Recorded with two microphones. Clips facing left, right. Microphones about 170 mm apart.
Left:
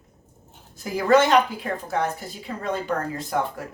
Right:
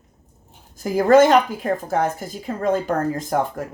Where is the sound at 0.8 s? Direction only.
45° right (ahead or behind).